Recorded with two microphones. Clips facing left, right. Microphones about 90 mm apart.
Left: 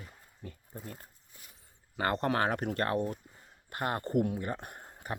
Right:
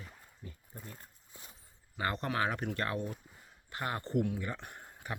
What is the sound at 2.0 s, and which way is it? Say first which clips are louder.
Speech: left 4 dB; 55° left (ahead or behind).